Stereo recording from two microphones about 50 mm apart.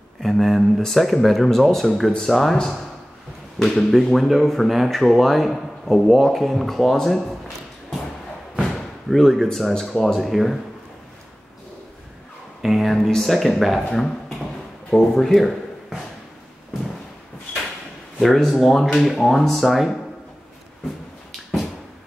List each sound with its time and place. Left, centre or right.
0.2 s speech: centre
8.7 s thump: centre
9.5 s speech: centre
12.6 s a sound: centre
12.9 s speech: centre
14.9 s speech: centre
18.2 s speech: centre